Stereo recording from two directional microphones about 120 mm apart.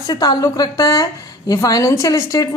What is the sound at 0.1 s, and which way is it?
A woman's voice, 30° left (ahead or behind).